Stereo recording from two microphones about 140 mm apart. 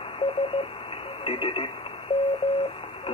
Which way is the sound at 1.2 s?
40° left (ahead or behind).